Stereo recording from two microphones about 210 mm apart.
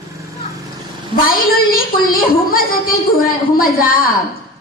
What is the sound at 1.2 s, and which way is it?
A woman's voice, 45° left (ahead or behind).